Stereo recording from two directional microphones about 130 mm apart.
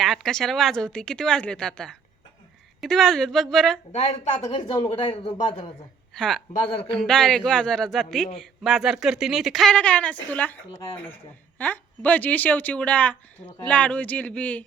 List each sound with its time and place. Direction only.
0.0 s speech: centre (ahead or behind)
3.9 s speech: 60° left (ahead or behind)
4.5 s speech: 45° left (ahead or behind)
6.1 s speech: 5° left (ahead or behind)